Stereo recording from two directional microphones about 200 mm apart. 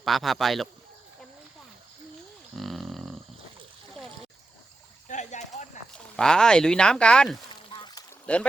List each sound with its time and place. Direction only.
0.0 s speech: centre (ahead or behind)
2.6 s livestock: centre (ahead or behind)
5.0 s a sound: 35° left (ahead or behind)
5.9 s speech: 5° left (ahead or behind)
7.7 s a sound: 20° left (ahead or behind)
8.3 s speech: 5° left (ahead or behind)